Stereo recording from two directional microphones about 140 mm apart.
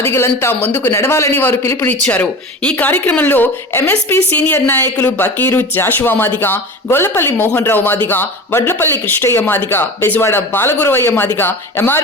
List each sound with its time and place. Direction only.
0.0 s speech: 15° left (ahead or behind)